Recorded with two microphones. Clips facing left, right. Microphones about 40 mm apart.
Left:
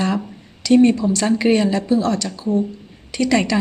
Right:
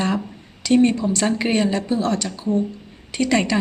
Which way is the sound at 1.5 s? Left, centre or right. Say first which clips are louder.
Left 3 dB; right.